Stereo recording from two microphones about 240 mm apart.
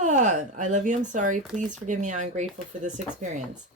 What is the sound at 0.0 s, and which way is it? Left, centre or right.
Speech, right.